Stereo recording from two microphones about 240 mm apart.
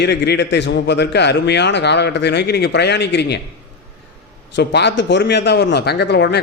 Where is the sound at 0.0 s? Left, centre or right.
Left.